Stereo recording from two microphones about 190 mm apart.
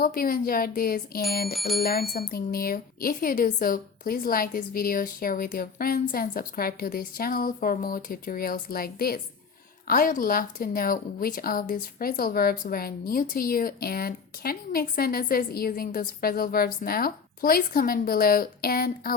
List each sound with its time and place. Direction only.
0.0 s a woman's voice: 50° left (ahead or behind)
1.5 s speech: centre (ahead or behind)
1.8 s a woman's voice: 50° left (ahead or behind)